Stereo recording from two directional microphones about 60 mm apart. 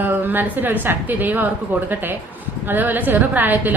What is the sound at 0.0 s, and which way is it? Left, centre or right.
A woman's voice, right.